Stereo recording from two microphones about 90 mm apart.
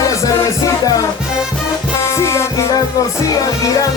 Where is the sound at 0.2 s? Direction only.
40° left (ahead or behind).